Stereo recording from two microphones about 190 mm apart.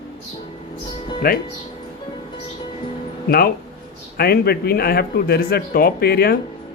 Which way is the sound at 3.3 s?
55° left (ahead or behind).